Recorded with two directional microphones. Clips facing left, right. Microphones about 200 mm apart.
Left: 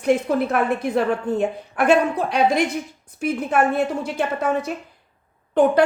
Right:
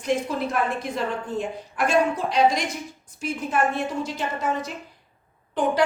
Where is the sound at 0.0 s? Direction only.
60° left (ahead or behind).